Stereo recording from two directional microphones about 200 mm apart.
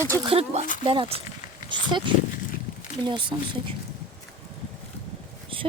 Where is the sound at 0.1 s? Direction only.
20° right (ahead or behind).